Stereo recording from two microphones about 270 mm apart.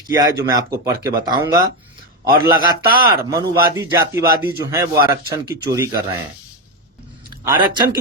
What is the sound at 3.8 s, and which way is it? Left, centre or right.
Speech, centre.